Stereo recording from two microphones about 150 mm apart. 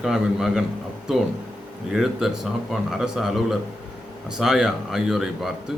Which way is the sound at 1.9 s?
5° right (ahead or behind).